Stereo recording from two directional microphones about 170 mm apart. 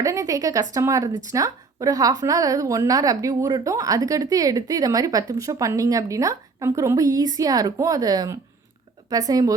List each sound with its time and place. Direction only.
0.0 s speech: 20° right (ahead or behind)